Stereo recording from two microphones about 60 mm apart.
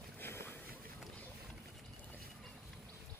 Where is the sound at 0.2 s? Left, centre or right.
Left.